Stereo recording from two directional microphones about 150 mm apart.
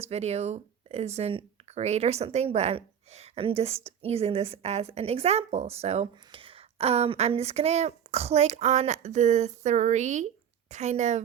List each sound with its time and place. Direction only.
0.0 s a woman's voice: 45° right (ahead or behind)